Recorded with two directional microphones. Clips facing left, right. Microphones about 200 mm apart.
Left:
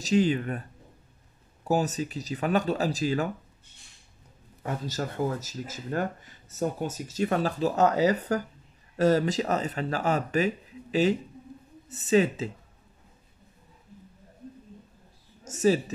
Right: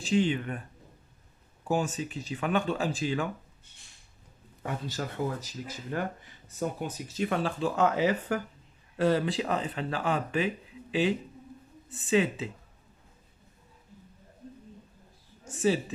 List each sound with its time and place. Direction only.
0.0 s speech: 40° left (ahead or behind)
1.6 s speech: 40° left (ahead or behind)
4.8 s speech: 40° left (ahead or behind)
15.4 s speech: 40° left (ahead or behind)